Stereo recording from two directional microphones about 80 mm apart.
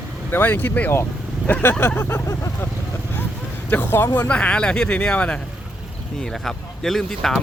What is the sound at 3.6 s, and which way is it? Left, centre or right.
Speech, left.